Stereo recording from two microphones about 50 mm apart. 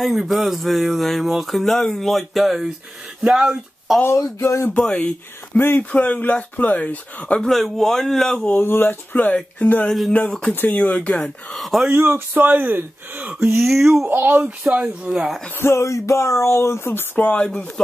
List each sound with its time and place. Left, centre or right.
0.0 s speech: centre
3.2 s speech: centre
4.0 s speech: left
4.6 s speech: left
7.4 s speech: centre
8.5 s speech: left
9.2 s speech: left
11.5 s speech: centre
11.9 s speech: right
13.6 s speech: centre
14.0 s speech: right
15.0 s speech: centre
15.6 s speech: left
17.2 s speech: left